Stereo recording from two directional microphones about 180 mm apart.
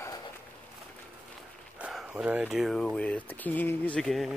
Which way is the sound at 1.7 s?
5° right (ahead or behind).